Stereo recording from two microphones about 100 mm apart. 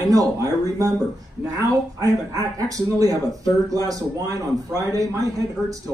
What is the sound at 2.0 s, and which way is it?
A man's voice, 35° right (ahead or behind).